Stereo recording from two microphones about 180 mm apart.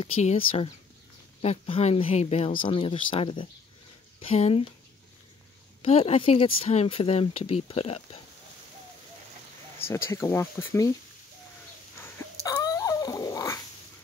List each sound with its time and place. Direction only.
0.0 s speech: 35° left (ahead or behind)
5.8 s speech: 35° left (ahead or behind)
9.8 s speech: 15° left (ahead or behind)
12.4 s dog: 20° left (ahead or behind)